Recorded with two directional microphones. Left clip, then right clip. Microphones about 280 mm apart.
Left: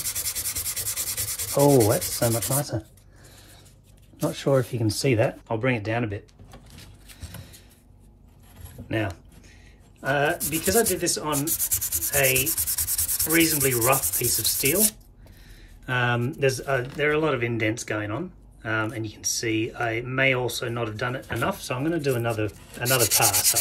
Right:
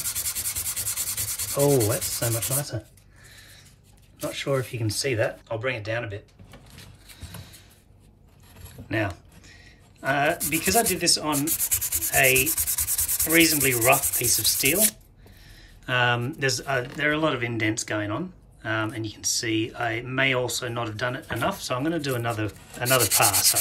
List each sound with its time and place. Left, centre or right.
0.0 s rub: centre
4.2 s speech: centre
8.8 s keys jangling: centre
10.0 s sanding: centre
15.8 s speech: centre